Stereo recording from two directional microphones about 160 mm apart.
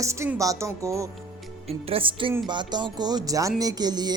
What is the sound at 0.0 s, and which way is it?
Speech, 15° right (ahead or behind).